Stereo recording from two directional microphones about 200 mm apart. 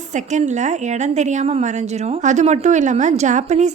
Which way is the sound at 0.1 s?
35° right (ahead or behind).